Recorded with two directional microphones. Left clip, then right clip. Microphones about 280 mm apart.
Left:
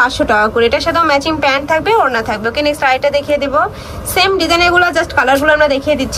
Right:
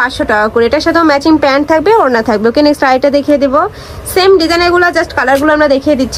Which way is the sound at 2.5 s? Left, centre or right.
Right.